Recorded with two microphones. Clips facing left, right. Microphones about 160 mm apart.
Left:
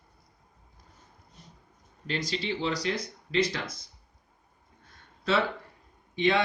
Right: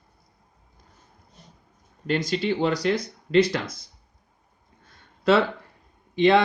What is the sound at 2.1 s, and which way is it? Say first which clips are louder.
Speech: right 7 dB; 50° right (ahead or behind).